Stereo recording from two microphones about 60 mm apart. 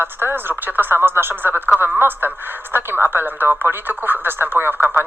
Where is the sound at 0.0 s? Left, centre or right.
Right.